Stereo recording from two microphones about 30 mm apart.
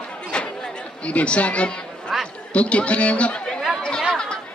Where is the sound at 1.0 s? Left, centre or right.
Left.